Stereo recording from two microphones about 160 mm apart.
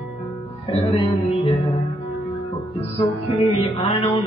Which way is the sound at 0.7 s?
40° left (ahead or behind).